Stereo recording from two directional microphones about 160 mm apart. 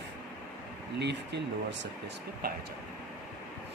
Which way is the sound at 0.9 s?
90° right.